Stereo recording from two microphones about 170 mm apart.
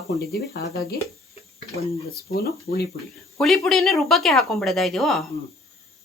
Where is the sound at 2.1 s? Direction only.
65° left (ahead or behind).